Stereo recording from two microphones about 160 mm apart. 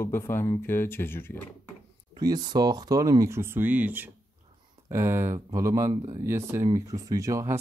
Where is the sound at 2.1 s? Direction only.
25° right (ahead or behind).